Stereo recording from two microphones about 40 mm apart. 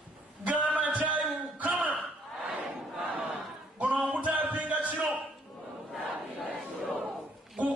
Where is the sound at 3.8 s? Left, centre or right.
Right.